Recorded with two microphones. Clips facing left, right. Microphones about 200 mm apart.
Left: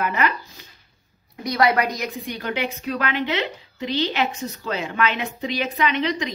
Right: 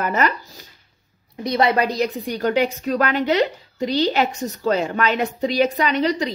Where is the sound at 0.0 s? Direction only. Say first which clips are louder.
Right 2 dB; 40° right (ahead or behind).